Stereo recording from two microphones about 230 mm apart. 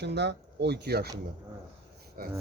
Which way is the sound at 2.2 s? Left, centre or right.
Right.